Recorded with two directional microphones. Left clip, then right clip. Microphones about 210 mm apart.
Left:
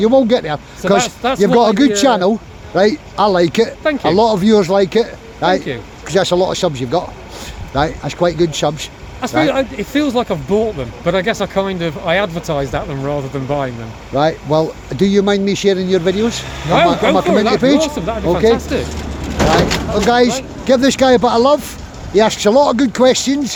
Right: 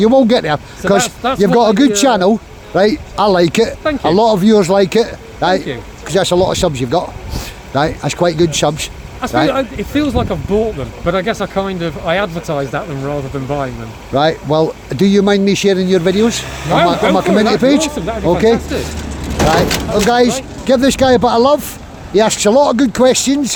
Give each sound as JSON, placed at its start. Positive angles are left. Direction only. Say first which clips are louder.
{"t": 0.0, "sound": "speech", "louder": "right 2 dB", "side_deg": -25}
{"t": 3.8, "sound": "speech", "louder": "right 1 dB", "side_deg": 5}
{"t": 4.2, "sound": "speech", "louder": "right 2 dB", "side_deg": -15}
{"t": 9.5, "sound": "speech", "louder": "even", "side_deg": 5}
{"t": 14.1, "sound": "speech", "louder": "right 1 dB", "side_deg": -20}
{"t": 16.6, "sound": "speech", "louder": "even", "side_deg": 0}
{"t": 17.2, "sound": "speech", "louder": "right 1 dB", "side_deg": -20}
{"t": 17.9, "sound": "speech", "louder": "even", "side_deg": 0}
{"t": 18.7, "sound": "speech", "louder": "left 1 dB", "side_deg": 20}
{"t": 19.5, "sound": "speech", "louder": "right 1 dB", "side_deg": -50}
{"t": 20.1, "sound": "speech", "louder": "left 1 dB", "side_deg": -15}